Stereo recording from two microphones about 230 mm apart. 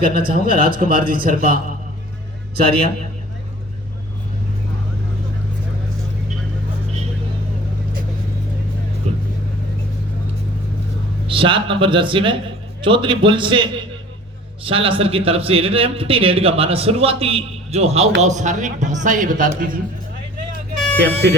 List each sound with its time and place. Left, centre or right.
0.4 s a man's voice: right
9.1 s vehicle: right
11.3 s a man's voice: right
20.7 s vehicle: centre